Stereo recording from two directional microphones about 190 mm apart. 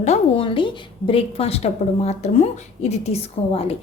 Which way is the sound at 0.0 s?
30° left (ahead or behind).